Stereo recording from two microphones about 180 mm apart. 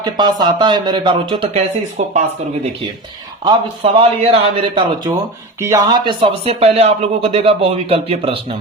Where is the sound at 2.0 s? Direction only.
40° right (ahead or behind).